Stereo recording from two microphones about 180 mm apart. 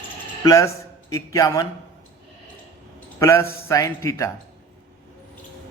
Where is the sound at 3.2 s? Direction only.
15° left (ahead or behind).